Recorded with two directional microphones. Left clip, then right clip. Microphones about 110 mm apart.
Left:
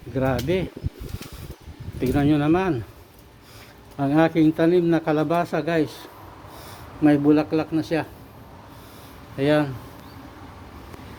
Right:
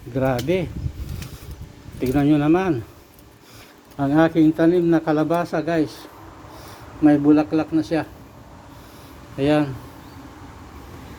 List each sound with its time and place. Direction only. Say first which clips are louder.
0.1 s speech: right 2 dB; 10° left (ahead or behind)
2.0 s speech: right 2 dB; 20° left (ahead or behind)
3.9 s speech: right 2 dB; 25° left (ahead or behind); by 8.0 s 45° left (ahead or behind)
9.4 s speech: right 1 dB; 25° left (ahead or behind)